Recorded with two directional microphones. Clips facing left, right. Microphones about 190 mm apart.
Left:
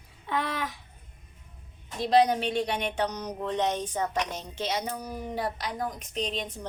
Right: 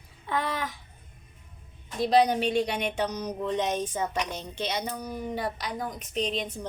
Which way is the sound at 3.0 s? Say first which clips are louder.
Right 2 dB; 10° right (ahead or behind).